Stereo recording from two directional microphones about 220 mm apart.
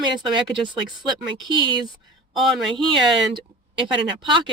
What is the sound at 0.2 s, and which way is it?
Speech, 20° right (ahead or behind).